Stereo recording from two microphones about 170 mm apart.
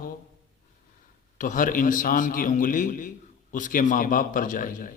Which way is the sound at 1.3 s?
50° left (ahead or behind).